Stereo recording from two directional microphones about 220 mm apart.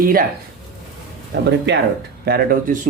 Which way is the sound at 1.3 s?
50° right (ahead or behind).